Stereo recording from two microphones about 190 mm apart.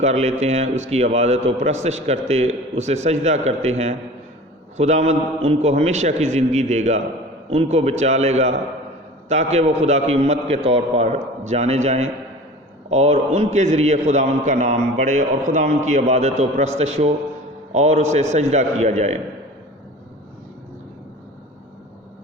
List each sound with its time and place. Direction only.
0.0 s a man's voice: 35° right (ahead or behind)